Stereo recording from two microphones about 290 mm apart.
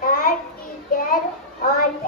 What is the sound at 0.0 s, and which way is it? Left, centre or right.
Child singing, left.